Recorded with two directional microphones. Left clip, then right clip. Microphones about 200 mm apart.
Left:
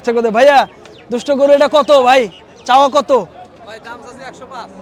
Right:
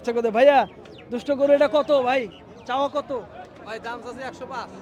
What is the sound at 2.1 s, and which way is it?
Speech, 50° left (ahead or behind).